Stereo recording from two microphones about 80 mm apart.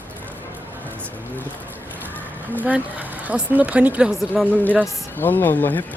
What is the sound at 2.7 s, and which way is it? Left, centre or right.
Speech, centre.